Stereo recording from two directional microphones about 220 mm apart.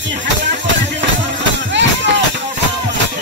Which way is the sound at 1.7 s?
55° right (ahead or behind).